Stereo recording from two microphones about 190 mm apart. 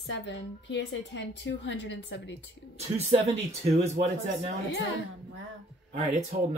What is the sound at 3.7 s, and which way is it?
Speech, 35° right (ahead or behind).